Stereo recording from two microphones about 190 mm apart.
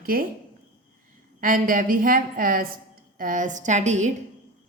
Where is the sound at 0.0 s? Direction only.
50° right (ahead or behind).